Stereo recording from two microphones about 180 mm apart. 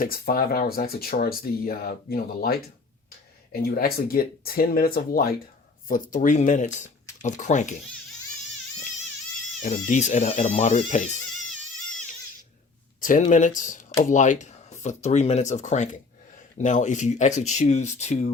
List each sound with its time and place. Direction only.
0.0 s speech: 55° left (ahead or behind)
9.6 s speech: 40° left (ahead or behind)
13.0 s speech: 45° left (ahead or behind)